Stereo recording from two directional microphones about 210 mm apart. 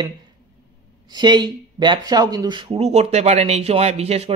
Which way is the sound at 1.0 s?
20° right (ahead or behind).